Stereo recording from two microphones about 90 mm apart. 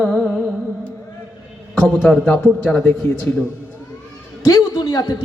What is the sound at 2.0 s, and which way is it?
Speech, 5° left (ahead or behind).